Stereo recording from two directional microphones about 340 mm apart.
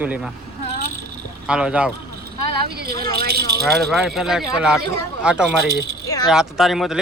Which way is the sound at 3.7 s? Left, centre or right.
Centre.